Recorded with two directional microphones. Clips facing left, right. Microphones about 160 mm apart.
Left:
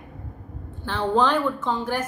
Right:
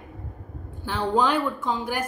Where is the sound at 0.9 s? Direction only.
10° right (ahead or behind).